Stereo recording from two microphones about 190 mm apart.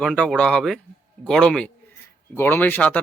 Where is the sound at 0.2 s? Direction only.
5° left (ahead or behind).